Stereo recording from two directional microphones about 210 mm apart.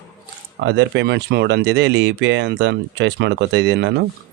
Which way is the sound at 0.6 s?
60° right (ahead or behind).